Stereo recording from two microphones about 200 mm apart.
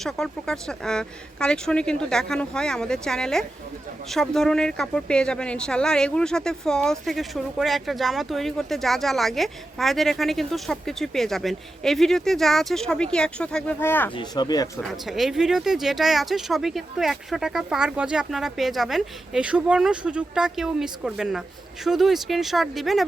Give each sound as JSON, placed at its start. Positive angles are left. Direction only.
{"t": 0.0, "sound": "speech", "side_deg": 5}
{"t": 14.2, "sound": "speech", "side_deg": 20}
{"t": 14.8, "sound": "speech", "side_deg": 0}